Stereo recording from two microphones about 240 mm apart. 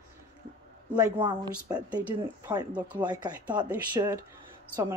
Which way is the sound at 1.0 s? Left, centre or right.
Centre.